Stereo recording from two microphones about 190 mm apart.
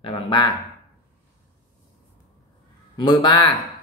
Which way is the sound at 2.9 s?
25° left (ahead or behind).